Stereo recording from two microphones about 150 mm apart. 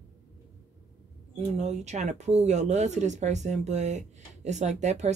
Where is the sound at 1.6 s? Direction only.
50° right (ahead or behind).